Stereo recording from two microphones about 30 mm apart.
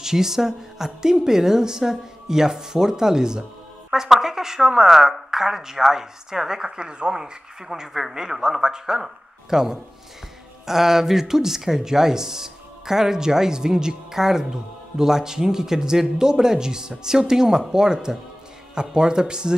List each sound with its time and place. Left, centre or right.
0.0 s speech: centre